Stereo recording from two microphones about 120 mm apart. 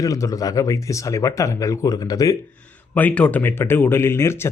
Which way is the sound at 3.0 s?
10° left (ahead or behind).